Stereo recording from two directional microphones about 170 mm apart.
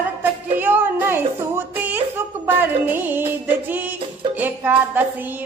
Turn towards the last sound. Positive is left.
turn(degrees=-10)  # may be behind; listen again after turning